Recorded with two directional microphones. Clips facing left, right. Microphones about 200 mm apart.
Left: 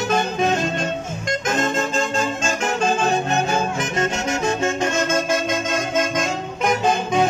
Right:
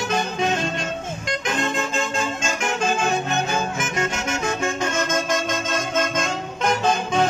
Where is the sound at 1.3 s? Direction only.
45° left (ahead or behind).